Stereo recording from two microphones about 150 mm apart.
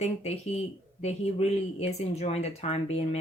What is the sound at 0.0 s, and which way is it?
Speech, 45° left (ahead or behind).